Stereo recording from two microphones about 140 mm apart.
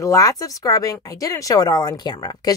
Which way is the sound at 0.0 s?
25° left (ahead or behind).